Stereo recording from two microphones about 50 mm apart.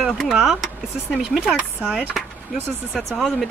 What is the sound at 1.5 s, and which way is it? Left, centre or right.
Speech, right.